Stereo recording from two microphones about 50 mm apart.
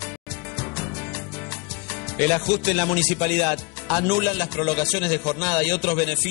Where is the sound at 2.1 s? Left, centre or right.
Left.